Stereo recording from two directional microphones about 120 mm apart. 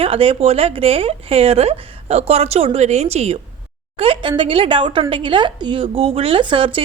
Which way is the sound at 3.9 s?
50° right (ahead or behind).